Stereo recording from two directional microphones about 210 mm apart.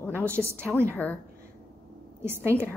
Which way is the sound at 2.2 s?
10° right (ahead or behind).